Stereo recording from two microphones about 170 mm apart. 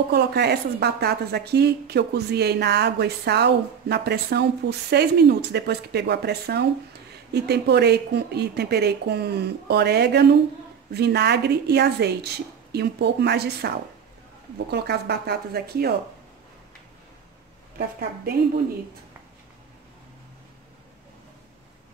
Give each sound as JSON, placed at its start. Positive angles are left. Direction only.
{"t": 0.1, "sound": "a woman's voice", "side_deg": -75}
{"t": 14.7, "sound": "a woman's voice", "side_deg": -75}